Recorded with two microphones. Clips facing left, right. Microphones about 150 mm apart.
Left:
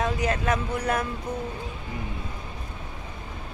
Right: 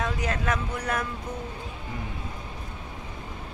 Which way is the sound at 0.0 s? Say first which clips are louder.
Left 3 dB; 25° left (ahead or behind).